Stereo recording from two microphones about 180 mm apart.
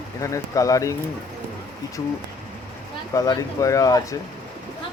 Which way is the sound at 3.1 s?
20° left (ahead or behind).